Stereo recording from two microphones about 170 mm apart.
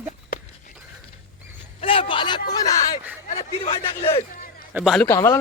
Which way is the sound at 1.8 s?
30° left (ahead or behind).